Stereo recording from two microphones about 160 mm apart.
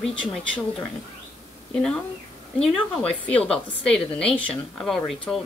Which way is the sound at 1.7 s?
5° left (ahead or behind).